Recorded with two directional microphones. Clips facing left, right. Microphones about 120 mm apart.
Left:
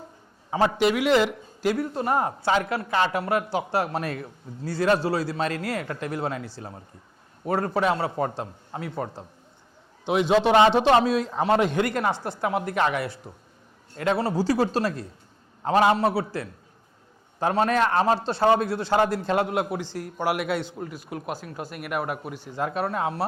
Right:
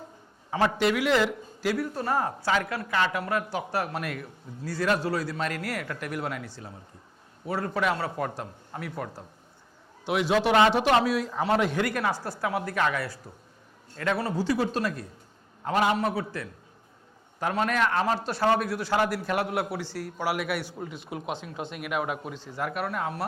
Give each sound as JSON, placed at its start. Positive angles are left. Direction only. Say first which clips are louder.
{"t": 0.5, "sound": "a man's voice", "louder": "left 3 dB", "side_deg": 20}
{"t": 7.4, "sound": "a man's voice", "louder": "left 5 dB", "side_deg": 45}
{"t": 7.7, "sound": "a man's voice", "louder": "left 4 dB", "side_deg": 30}
{"t": 20.7, "sound": "speech", "louder": "left 2 dB", "side_deg": 0}
{"t": 21.0, "sound": "speech", "louder": "right 1 dB", "side_deg": -15}
{"t": 21.7, "sound": "a man's voice", "louder": "left 1 dB", "side_deg": 5}